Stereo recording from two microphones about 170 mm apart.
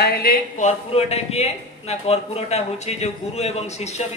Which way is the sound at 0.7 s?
40° left (ahead or behind).